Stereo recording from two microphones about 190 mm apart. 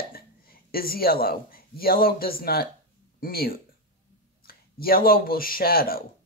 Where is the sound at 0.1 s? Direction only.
50° left (ahead or behind).